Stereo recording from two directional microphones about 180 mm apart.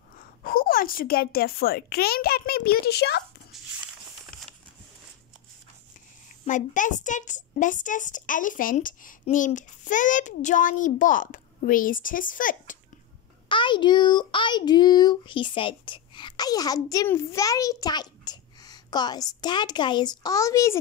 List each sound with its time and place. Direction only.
0.4 s a child's voice: 55° left (ahead or behind)
3.5 s a sound: centre (ahead or behind)
6.4 s a woman's voice: 45° left (ahead or behind)
13.5 s a child's voice: 25° left (ahead or behind)